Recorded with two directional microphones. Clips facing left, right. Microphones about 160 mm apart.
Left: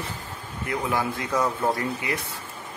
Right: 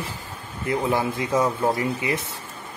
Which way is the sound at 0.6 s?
25° right (ahead or behind).